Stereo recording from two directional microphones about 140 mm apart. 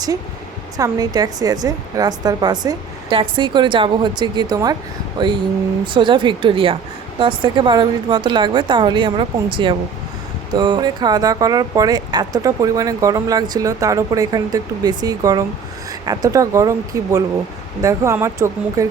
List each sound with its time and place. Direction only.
0.8 s a woman's voice: 25° right (ahead or behind)